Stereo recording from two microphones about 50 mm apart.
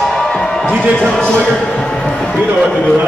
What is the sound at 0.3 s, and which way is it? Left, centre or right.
Music, centre.